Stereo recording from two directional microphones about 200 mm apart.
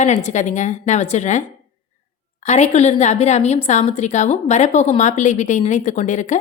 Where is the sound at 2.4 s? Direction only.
35° left (ahead or behind).